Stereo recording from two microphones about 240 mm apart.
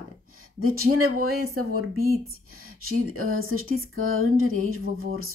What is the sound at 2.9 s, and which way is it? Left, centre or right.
Speech, right.